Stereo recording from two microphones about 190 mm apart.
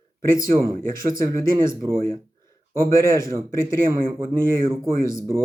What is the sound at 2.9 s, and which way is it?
Speech, 50° right (ahead or behind).